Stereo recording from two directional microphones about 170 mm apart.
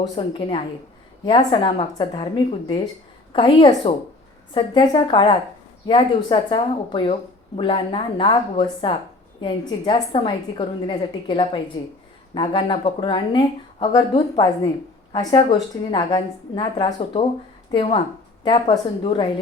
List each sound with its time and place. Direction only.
0.2 s speech: 30° left (ahead or behind)